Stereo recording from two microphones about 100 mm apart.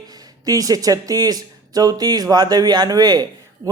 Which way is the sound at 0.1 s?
40° right (ahead or behind).